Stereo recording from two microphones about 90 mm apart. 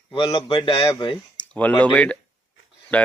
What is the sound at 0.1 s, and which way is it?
Speech, 65° left (ahead or behind).